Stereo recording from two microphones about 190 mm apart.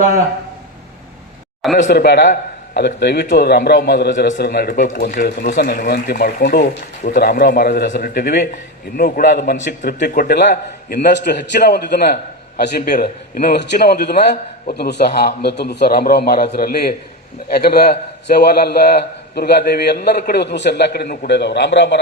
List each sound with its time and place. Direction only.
1.9 s a man's voice: 60° left (ahead or behind)